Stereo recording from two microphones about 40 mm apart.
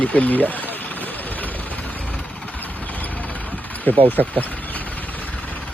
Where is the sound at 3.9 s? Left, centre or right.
Left.